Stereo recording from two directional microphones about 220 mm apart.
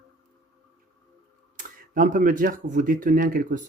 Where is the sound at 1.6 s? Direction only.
35° right (ahead or behind).